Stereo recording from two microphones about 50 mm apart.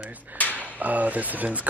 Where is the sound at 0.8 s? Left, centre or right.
Right.